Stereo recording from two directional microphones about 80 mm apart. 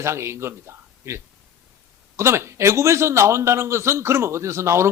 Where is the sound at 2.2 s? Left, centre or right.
Right.